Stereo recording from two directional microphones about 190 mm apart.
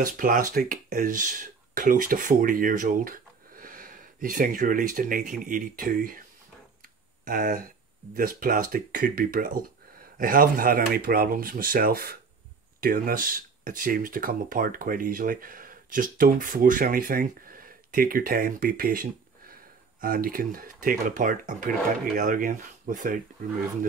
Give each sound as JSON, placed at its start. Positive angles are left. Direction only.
{"t": 0.0, "sound": "speech", "side_deg": -45}
{"t": 7.2, "sound": "speech", "side_deg": -45}